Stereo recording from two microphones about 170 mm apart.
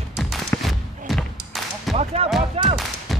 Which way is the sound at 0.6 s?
Centre (ahead or behind).